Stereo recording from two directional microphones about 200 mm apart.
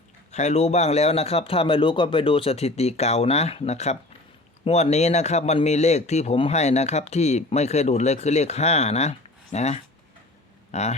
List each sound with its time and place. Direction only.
0.3 s speech: 35° left (ahead or behind)